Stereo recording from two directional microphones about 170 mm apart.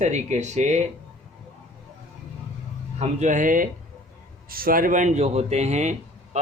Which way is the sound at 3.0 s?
45° right (ahead or behind).